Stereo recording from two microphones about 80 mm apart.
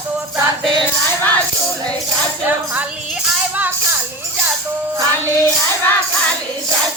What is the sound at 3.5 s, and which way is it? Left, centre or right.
Music, right.